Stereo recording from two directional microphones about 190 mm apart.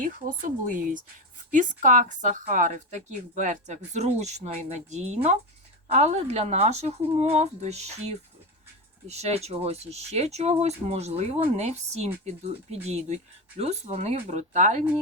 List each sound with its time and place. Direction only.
0.0 s speech: 45° right (ahead or behind)